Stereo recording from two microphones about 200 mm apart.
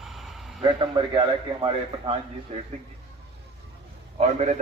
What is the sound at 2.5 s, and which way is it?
Speech, 30° right (ahead or behind).